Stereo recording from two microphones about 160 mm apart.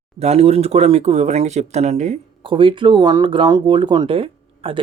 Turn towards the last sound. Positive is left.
turn(degrees=-35)  # may be behind; listen again after turning